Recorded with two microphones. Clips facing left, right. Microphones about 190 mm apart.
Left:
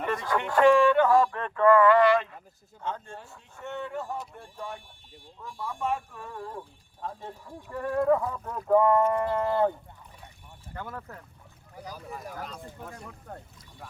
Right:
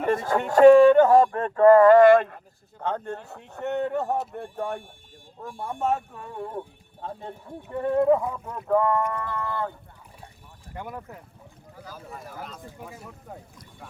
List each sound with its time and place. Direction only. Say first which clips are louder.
0.0 s speech: right 5 dB; 45° right (ahead or behind)
6.3 s speech: right 6 dB; 20° right (ahead or behind)
8.7 s speech: left 2 dB; 20° left (ahead or behind)
10.8 s speech: right 2 dB; 15° right (ahead or behind)
12.1 s speech: even; centre (ahead or behind)